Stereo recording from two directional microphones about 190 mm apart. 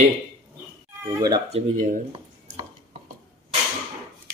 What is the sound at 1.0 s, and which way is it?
Speech, 20° right (ahead or behind).